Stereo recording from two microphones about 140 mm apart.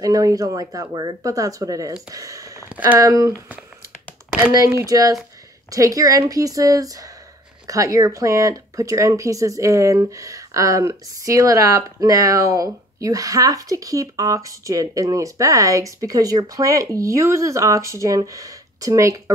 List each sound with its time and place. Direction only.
0.0 s speech: 25° right (ahead or behind)
4.5 s speech: 20° right (ahead or behind)